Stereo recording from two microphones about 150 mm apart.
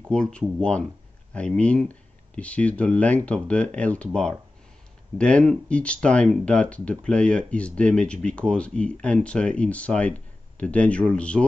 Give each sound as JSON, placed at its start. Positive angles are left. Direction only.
{"t": 0.1, "sound": "speech", "side_deg": 5}